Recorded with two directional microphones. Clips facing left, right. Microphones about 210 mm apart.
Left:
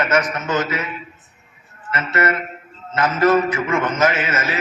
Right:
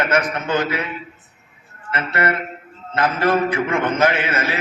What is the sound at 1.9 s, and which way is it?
Speech, 55° right (ahead or behind).